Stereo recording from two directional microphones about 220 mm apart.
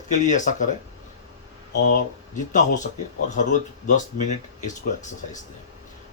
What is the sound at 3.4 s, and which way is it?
Speech, 35° left (ahead or behind).